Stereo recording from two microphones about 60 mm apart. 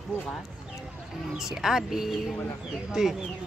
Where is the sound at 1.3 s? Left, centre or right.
Centre.